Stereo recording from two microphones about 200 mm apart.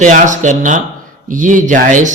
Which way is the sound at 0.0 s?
40° right (ahead or behind).